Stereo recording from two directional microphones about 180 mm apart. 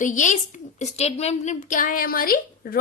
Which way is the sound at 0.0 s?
45° left (ahead or behind).